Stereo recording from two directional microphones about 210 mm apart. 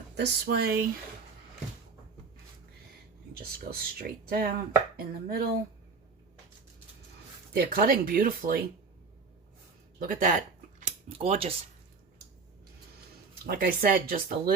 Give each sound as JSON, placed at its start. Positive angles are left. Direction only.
{"t": 0.2, "sound": "speech", "side_deg": -50}
{"t": 3.3, "sound": "speech", "side_deg": -45}
{"t": 7.5, "sound": "speech", "side_deg": -45}
{"t": 10.0, "sound": "speech", "side_deg": -40}
{"t": 13.4, "sound": "speech", "side_deg": -45}